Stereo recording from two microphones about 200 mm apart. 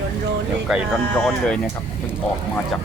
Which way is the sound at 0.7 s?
Centre (ahead or behind).